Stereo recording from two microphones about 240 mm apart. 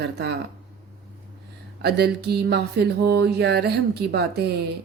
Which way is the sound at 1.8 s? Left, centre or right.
Right.